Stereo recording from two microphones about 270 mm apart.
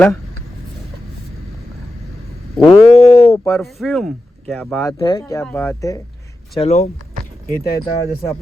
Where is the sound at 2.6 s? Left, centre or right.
Left.